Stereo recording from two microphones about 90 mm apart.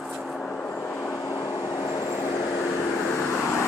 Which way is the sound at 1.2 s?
40° left (ahead or behind).